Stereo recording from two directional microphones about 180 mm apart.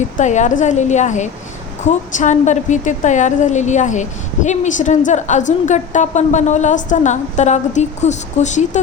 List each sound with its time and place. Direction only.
0.2 s a woman's voice: 40° left (ahead or behind)